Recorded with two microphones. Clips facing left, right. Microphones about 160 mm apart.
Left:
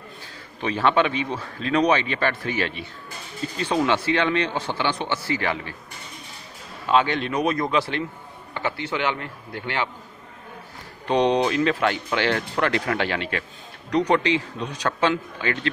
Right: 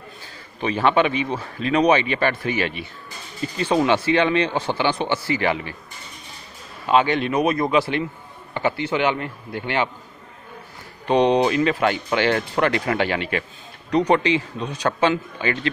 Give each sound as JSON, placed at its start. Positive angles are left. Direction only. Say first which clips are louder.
{"t": 0.6, "sound": "speech", "louder": "right 2 dB", "side_deg": -5}
{"t": 6.9, "sound": "speech", "louder": "right 2 dB", "side_deg": -10}
{"t": 11.1, "sound": "speech", "louder": "right 3 dB", "side_deg": -5}